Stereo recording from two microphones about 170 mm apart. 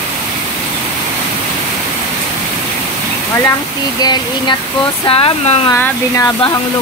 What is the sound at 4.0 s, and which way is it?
Speech, 25° left (ahead or behind).